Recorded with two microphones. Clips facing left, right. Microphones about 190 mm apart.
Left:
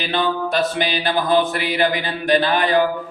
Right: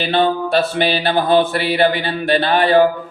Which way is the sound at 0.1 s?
30° right (ahead or behind).